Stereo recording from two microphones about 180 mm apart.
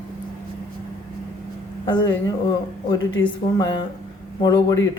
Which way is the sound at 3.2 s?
25° left (ahead or behind).